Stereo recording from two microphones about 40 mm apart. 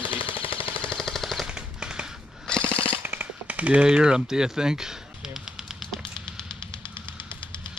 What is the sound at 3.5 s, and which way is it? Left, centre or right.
Typing, right.